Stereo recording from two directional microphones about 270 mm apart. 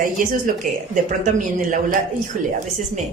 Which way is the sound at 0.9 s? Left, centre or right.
Right.